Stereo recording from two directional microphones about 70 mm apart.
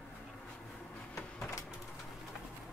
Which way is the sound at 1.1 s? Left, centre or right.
Left.